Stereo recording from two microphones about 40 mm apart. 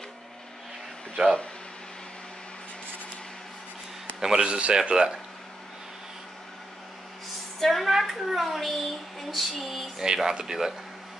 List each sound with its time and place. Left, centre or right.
4.2 s a man's voice: centre
4.5 s speech: right
4.7 s speech: centre
7.6 s a child's voice: centre
9.9 s speech: centre